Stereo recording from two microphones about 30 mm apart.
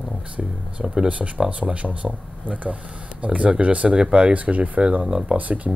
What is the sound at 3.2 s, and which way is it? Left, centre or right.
Speech, right.